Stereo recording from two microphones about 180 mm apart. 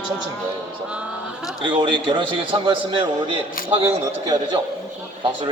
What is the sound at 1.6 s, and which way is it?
A man's voice, 25° right (ahead or behind).